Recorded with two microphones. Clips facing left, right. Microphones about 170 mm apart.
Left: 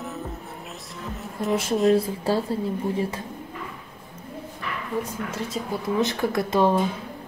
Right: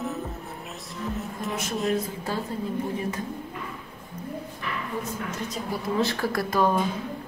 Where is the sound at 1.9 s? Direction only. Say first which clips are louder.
Left 6 dB; 30° left (ahead or behind).